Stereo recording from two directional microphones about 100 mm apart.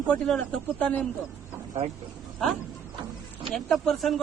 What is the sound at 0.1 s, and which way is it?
Speech, 10° left (ahead or behind).